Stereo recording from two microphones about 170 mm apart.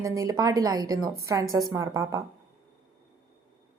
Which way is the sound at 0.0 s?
20° right (ahead or behind).